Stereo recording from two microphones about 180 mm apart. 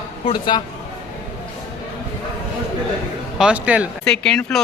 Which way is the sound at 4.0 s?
5° left (ahead or behind).